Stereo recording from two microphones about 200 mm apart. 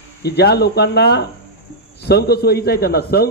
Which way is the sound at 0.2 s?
55° left (ahead or behind).